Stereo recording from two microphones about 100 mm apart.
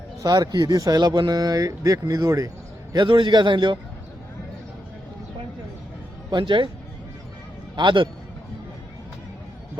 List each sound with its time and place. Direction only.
0.2 s speech: 40° right (ahead or behind)
2.9 s a man's voice: 50° right (ahead or behind)
6.3 s speech: 55° right (ahead or behind)
7.8 s a man's voice: 50° right (ahead or behind)